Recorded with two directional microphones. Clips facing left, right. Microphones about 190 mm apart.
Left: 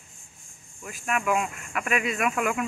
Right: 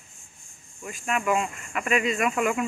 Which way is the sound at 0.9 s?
5° left (ahead or behind).